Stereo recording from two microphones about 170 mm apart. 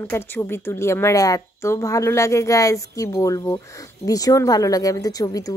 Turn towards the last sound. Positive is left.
turn(degrees=20)  # may be behind; listen again after turning